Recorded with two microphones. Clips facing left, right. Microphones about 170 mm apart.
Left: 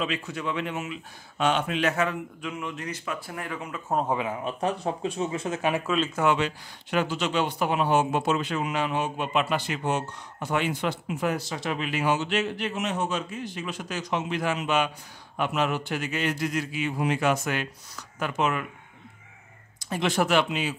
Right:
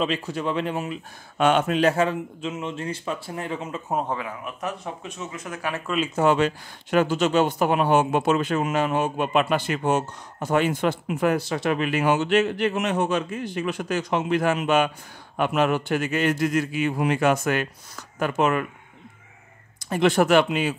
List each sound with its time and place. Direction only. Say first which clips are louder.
0.0 s speech: right 5 dB; 35° right (ahead or behind)
1.4 s speech: right 5 dB; 50° right (ahead or behind); by 3.8 s 25° right (ahead or behind)
4.1 s a man's voice: left 3 dB; 25° left (ahead or behind)
6.3 s speech: right 5 dB; 45° right (ahead or behind)
19.8 s speech: right 6 dB; 55° right (ahead or behind)